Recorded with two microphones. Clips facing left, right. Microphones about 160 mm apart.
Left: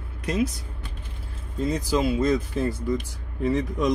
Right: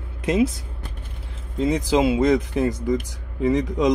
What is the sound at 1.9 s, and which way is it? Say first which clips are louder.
Speech: right 5 dB; 90° right.